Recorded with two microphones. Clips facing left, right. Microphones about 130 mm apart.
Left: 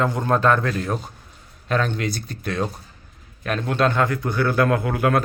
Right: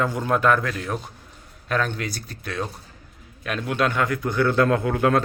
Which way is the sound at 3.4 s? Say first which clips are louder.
Left 3 dB; 40° left (ahead or behind).